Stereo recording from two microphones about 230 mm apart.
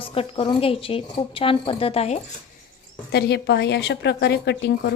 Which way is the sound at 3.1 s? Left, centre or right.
Left.